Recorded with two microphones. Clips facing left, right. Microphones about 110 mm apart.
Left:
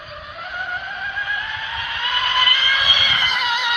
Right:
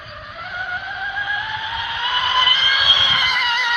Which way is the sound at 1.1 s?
10° right (ahead or behind).